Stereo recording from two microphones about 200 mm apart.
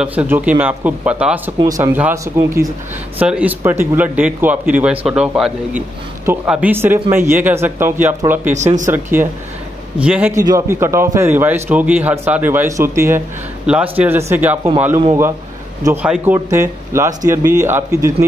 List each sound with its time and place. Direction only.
0.0 s speech: 5° right (ahead or behind)
8.5 s speech: 35° right (ahead or behind)
8.8 s speech: 10° right (ahead or behind)
15.8 s speech: 10° right (ahead or behind)